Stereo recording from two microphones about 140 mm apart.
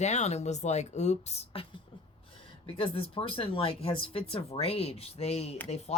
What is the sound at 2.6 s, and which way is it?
Speech, 40° left (ahead or behind).